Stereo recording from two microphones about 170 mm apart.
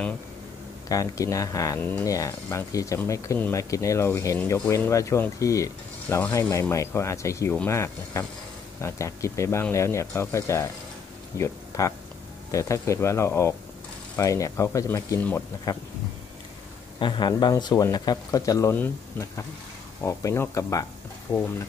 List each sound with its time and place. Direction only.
0.8 s speech: 20° left (ahead or behind)
17.0 s speech: 25° left (ahead or behind)